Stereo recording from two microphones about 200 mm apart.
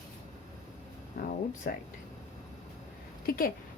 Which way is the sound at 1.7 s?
50° left (ahead or behind).